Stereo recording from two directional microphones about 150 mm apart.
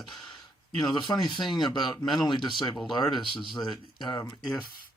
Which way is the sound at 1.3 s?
30° left (ahead or behind).